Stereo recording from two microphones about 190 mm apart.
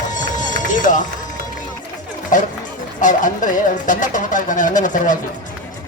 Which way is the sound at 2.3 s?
45° left (ahead or behind).